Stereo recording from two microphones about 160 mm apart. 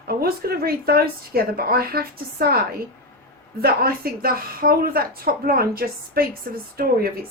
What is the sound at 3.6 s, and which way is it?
A woman's voice, 70° right (ahead or behind).